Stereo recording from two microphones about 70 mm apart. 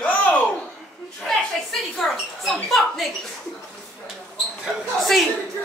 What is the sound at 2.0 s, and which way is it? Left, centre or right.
A woman's voice, centre.